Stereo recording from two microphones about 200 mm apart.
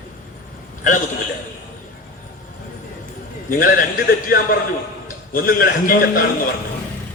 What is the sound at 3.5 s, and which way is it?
Speech, 40° left (ahead or behind).